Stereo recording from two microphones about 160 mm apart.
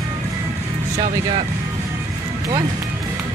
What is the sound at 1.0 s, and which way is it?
Speech, 45° right (ahead or behind).